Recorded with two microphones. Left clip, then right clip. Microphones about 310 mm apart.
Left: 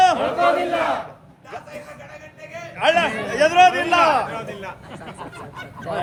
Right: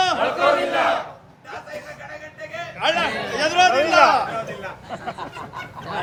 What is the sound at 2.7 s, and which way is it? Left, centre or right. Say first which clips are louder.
A man's voice: left 3 dB; left.